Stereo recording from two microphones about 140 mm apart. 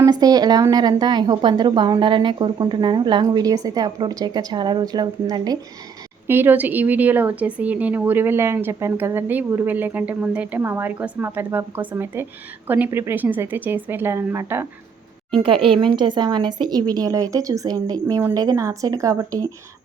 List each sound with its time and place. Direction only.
0.0 s a woman's voice: 25° right (ahead or behind)
6.2 s speech: 15° right (ahead or behind)
15.4 s a woman's voice: 40° right (ahead or behind)
18.2 s a woman's voice: 15° right (ahead or behind)